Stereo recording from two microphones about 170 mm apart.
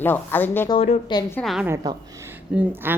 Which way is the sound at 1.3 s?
Centre (ahead or behind).